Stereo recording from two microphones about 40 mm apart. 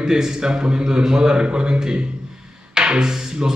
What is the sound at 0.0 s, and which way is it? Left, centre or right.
Speech, centre.